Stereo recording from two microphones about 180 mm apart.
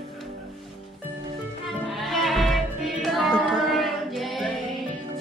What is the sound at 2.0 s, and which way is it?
Music, centre (ahead or behind).